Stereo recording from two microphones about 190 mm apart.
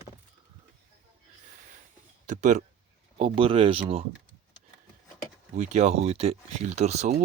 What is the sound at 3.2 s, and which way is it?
Speech, 30° right (ahead or behind).